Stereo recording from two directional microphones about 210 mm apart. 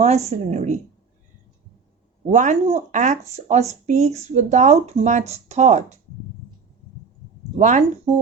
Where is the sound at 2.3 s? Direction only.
35° right (ahead or behind).